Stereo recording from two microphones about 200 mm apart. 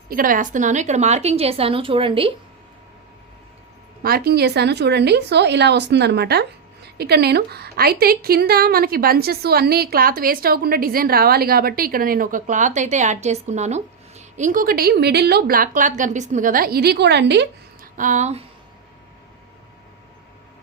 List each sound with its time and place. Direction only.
0.1 s a woman's voice: 45° right (ahead or behind); by 2.3 s 25° right (ahead or behind)
4.0 s a woman's voice: 50° right (ahead or behind)
17.9 s a woman's voice: 40° right (ahead or behind)